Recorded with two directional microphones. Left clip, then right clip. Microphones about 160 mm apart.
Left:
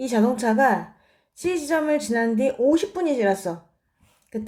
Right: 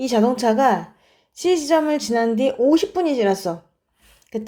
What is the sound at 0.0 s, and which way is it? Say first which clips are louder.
Speech: right 4 dB; 25° right (ahead or behind).